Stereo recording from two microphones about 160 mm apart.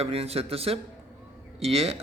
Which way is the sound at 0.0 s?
40° right (ahead or behind).